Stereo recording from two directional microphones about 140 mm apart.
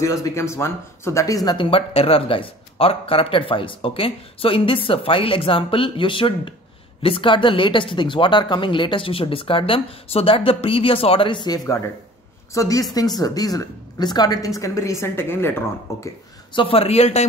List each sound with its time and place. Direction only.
0.0 s a woman's voice: 20° left (ahead or behind)
1.7 s a woman's voice: 40° left (ahead or behind); by 16.0 s 20° left (ahead or behind)
16.5 s speech: 40° left (ahead or behind)